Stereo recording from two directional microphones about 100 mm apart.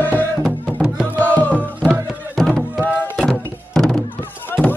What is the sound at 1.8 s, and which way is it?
Music, 5° left (ahead or behind).